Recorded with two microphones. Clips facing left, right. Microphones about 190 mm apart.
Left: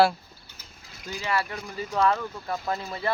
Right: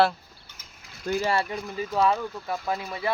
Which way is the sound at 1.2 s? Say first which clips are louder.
Even; 30° right (ahead or behind).